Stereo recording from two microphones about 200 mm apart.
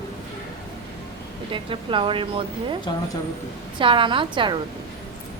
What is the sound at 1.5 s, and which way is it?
Speech, 25° right (ahead or behind).